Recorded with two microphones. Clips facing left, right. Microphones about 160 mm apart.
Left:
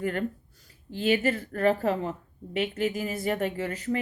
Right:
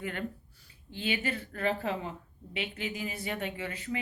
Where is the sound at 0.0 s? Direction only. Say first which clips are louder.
Left 7 dB; 40° left (ahead or behind).